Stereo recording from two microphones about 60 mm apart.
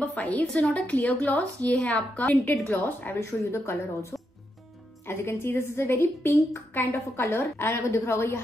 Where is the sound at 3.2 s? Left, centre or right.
Left.